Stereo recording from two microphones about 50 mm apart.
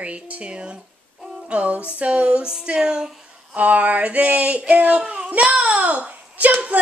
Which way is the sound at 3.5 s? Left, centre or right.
Right.